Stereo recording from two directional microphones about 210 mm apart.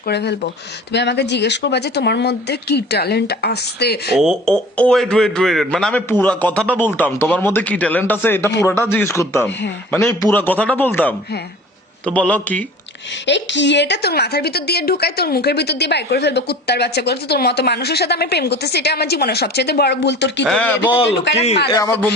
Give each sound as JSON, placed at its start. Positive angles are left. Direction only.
{"t": 0.0, "sound": "a woman's voice", "side_deg": 50}
{"t": 4.2, "sound": "speech", "side_deg": 0}
{"t": 9.5, "sound": "speech", "side_deg": 55}
{"t": 9.9, "sound": "speech", "side_deg": 15}
{"t": 13.2, "sound": "a woman's voice", "side_deg": 55}
{"t": 20.5, "sound": "speech", "side_deg": 5}
{"t": 20.8, "sound": "a man's voice", "side_deg": 25}
{"t": 21.7, "sound": "speech", "side_deg": 15}